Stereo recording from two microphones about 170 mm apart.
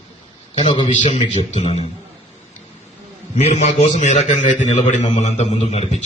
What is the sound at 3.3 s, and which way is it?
A man's voice, 40° left (ahead or behind).